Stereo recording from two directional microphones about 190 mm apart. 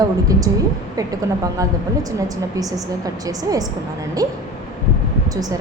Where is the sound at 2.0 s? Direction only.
20° right (ahead or behind).